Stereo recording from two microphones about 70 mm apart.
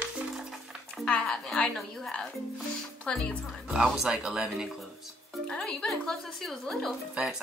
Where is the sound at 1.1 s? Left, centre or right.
Centre.